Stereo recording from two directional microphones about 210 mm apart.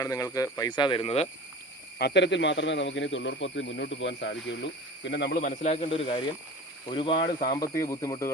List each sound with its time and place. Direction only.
0.0 s speech: 15° left (ahead or behind)
2.0 s a man's voice: 55° left (ahead or behind)
5.4 s speech: 35° left (ahead or behind); by 8.3 s 15° left (ahead or behind)